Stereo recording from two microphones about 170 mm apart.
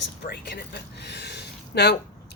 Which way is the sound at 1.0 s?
80° left.